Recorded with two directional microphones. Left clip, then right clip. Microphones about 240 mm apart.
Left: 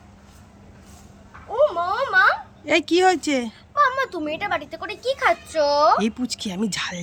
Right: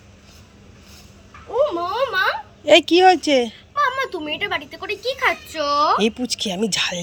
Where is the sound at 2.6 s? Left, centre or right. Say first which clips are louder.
Right 6 dB; centre.